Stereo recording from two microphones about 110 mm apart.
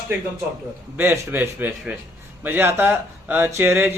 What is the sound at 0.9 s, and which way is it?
A man's voice, 20° right (ahead or behind).